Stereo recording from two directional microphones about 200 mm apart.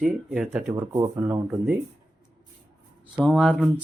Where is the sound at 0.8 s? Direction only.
15° right (ahead or behind).